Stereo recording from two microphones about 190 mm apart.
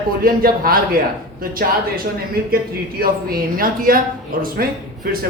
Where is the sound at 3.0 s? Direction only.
50° right (ahead or behind).